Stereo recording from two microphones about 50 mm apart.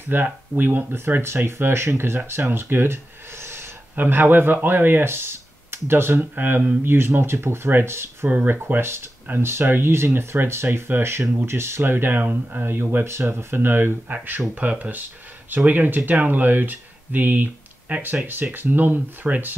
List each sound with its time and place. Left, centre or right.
0.1 s speech: right
3.9 s speech: right
6.3 s speech: right
6.8 s speech: right
13.0 s speech: right
14.0 s speech: right